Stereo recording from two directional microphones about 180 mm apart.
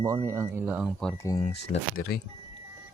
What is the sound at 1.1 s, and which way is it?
Speech, 20° left (ahead or behind).